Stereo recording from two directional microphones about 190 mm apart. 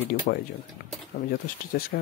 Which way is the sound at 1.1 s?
35° left (ahead or behind).